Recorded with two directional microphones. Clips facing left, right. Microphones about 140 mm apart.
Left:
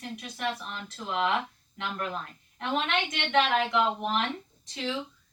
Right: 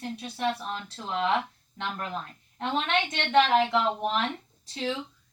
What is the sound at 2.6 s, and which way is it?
A woman's voice, 30° right (ahead or behind).